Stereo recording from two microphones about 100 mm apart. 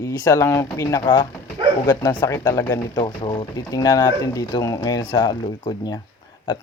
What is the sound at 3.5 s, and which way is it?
Speech, 40° left (ahead or behind).